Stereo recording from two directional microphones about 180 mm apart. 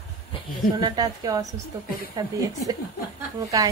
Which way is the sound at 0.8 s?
20° right (ahead or behind).